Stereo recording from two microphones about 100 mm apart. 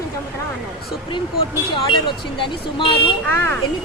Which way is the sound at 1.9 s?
55° left (ahead or behind).